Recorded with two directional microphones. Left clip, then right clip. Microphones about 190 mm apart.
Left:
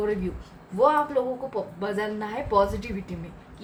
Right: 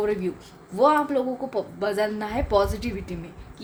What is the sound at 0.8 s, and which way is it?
A woman's voice, 45° right (ahead or behind).